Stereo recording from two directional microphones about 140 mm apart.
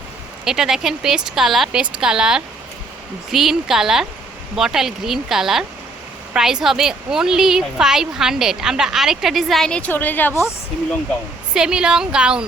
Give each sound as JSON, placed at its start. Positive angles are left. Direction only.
{"t": 0.4, "sound": "a woman's voice", "side_deg": -5}
{"t": 11.5, "sound": "a woman's voice", "side_deg": -5}